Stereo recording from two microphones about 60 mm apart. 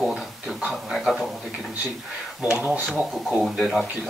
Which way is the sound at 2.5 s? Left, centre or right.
Right.